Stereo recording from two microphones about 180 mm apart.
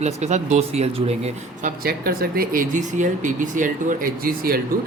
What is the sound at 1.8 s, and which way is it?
Speech, 55° right (ahead or behind).